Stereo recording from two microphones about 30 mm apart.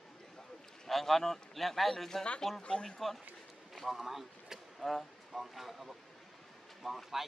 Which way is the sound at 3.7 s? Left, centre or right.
Centre.